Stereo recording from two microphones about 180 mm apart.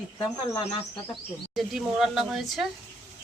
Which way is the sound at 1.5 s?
Centre (ahead or behind).